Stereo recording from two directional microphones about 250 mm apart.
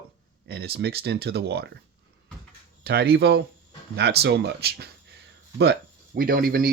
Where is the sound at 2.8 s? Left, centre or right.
Right.